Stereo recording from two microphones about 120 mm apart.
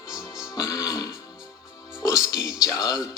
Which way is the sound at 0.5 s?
30° left (ahead or behind).